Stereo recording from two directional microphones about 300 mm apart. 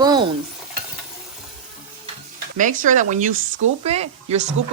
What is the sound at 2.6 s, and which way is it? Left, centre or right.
Speech, right.